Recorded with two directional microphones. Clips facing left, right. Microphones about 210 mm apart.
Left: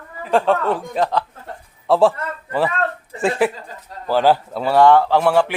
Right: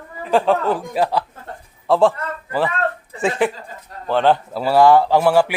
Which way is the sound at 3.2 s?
Centre (ahead or behind).